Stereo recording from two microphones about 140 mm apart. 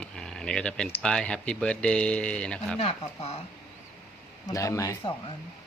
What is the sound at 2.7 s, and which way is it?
Speech, 45° left (ahead or behind).